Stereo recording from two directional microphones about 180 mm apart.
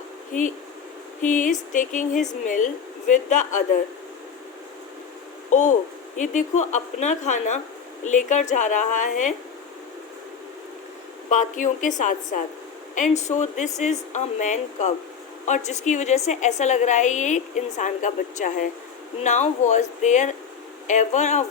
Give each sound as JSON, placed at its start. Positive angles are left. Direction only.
{"t": 1.2, "sound": "a woman's voice", "side_deg": 45}
{"t": 5.5, "sound": "a woman's voice", "side_deg": 40}
{"t": 11.3, "sound": "a woman's voice", "side_deg": 45}